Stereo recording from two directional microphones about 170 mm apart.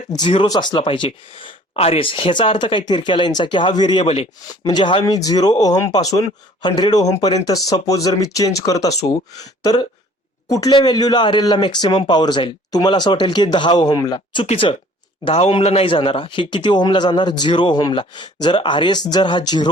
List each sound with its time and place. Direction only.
0.1 s speech: 30° left (ahead or behind)